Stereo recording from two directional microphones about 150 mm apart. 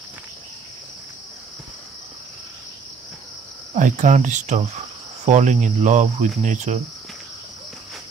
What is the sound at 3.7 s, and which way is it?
Cricket, 55° right (ahead or behind).